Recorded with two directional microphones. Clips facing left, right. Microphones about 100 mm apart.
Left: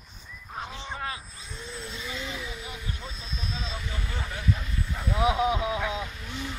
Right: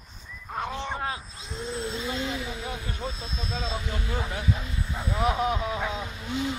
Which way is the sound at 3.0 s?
35° right (ahead or behind).